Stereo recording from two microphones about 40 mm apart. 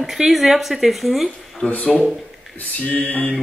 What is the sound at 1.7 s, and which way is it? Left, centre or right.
Speech, left.